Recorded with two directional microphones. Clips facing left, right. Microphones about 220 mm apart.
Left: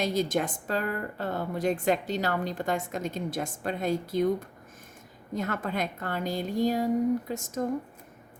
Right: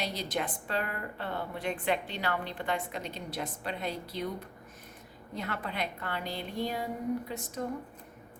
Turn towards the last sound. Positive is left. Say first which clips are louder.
# left 5 dB
turn(degrees=45)  # may be behind; listen again after turning